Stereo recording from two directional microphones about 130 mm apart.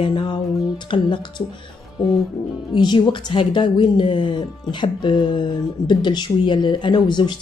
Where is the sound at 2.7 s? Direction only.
35° left (ahead or behind).